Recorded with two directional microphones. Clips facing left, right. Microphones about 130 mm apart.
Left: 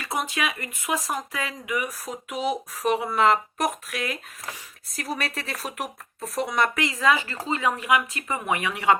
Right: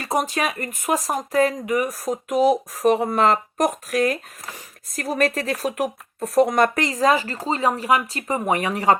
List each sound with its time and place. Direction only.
0.0 s speech: 40° right (ahead or behind)